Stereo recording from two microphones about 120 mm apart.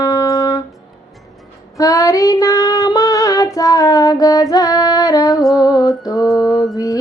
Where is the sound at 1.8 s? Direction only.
30° left (ahead or behind).